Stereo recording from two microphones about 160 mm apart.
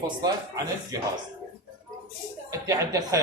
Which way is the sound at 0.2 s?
25° right (ahead or behind).